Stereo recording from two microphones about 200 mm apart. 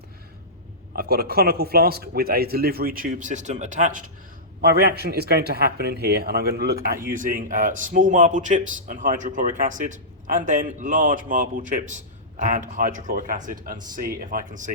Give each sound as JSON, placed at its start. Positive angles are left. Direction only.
{"t": 0.9, "sound": "a man's voice", "side_deg": -50}
{"t": 4.6, "sound": "a man's voice", "side_deg": -50}